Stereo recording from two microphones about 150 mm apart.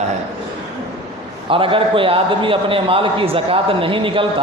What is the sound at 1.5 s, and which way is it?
Speech, 35° right (ahead or behind).